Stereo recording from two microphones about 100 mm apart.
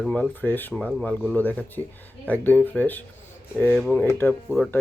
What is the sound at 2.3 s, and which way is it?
Speech, 15° left (ahead or behind).